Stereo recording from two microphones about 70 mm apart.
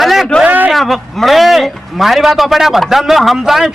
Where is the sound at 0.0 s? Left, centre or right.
Centre.